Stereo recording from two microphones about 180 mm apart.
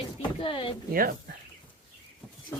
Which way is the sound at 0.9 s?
55° right (ahead or behind).